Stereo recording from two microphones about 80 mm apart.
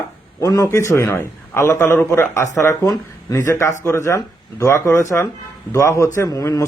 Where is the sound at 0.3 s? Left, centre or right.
Left.